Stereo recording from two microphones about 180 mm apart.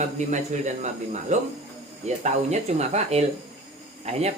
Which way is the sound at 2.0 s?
40° right (ahead or behind).